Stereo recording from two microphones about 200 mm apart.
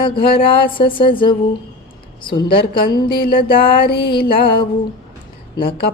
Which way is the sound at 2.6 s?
50° left (ahead or behind).